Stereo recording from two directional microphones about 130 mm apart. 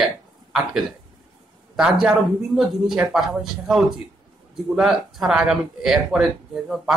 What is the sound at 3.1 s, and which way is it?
Speech, centre (ahead or behind).